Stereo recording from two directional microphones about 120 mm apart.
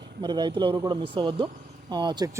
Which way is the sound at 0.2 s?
35° right (ahead or behind).